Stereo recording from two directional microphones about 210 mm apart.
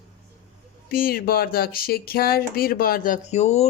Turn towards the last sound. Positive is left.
turn(degrees=30)  # may be behind; listen again after turning